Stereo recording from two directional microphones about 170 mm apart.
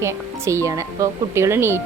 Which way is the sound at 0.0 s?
15° right (ahead or behind).